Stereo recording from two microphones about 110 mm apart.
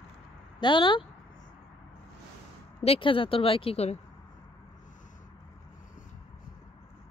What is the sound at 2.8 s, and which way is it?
Speech, 60° left (ahead or behind).